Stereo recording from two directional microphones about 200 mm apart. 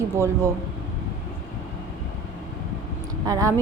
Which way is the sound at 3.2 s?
15° right (ahead or behind).